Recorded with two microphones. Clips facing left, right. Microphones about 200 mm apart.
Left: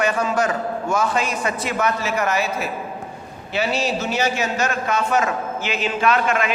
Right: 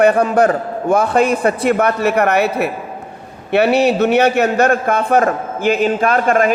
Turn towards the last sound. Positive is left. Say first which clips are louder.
# right 5 dB
turn(degrees=-50)  # may be behind; listen again after turning